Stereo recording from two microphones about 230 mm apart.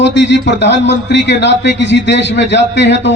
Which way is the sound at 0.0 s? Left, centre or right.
Left.